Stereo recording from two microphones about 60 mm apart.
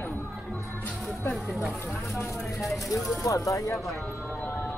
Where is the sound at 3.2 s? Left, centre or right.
Left.